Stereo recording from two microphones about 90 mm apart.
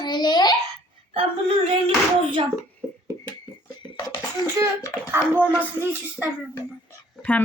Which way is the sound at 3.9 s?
50° left (ahead or behind).